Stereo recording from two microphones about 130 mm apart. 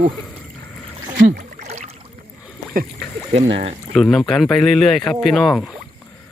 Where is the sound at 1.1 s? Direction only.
85° right; by 1.9 s 60° right (ahead or behind).